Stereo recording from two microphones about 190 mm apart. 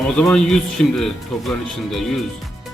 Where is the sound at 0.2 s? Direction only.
5° left (ahead or behind).